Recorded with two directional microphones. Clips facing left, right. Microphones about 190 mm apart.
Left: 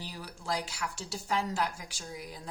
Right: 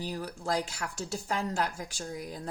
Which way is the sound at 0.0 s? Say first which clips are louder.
Right 7 dB; 50° right (ahead or behind).